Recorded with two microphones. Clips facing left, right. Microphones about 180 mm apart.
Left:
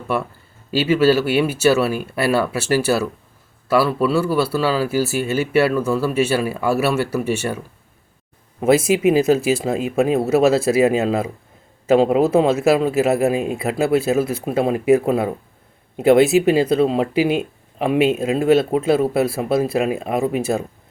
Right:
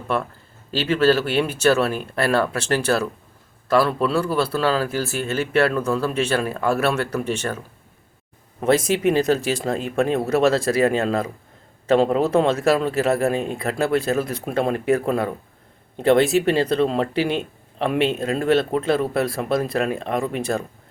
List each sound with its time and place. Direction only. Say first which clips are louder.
0.1 s speech: left 1 dB; 5° left (ahead or behind)
8.6 s speech: left 3 dB; 10° left (ahead or behind)